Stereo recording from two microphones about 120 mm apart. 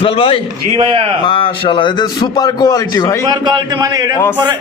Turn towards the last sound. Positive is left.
turn(degrees=-30)  # may be behind; listen again after turning